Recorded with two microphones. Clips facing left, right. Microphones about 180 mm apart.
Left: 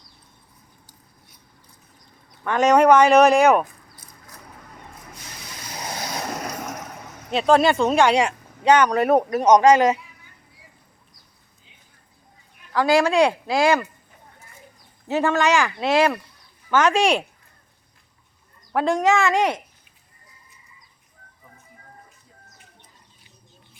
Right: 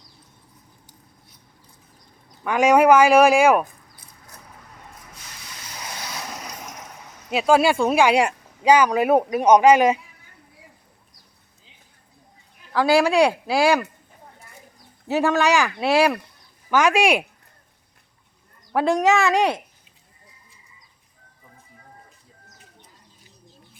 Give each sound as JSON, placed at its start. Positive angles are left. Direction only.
{"t": 2.4, "sound": "speech", "side_deg": -10}
{"t": 5.8, "sound": "vehicle", "side_deg": 40}
{"t": 7.3, "sound": "speech", "side_deg": -5}
{"t": 12.7, "sound": "speech", "side_deg": -10}
{"t": 15.0, "sound": "speech", "side_deg": -15}
{"t": 18.7, "sound": "speech", "side_deg": -15}